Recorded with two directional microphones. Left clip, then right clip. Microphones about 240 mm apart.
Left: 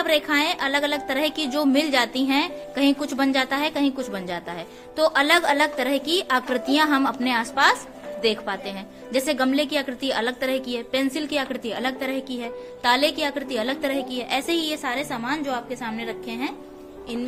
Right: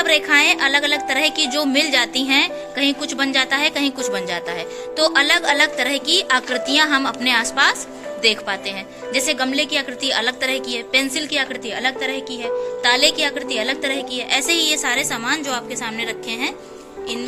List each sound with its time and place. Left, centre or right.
0.0 s a woman's voice: centre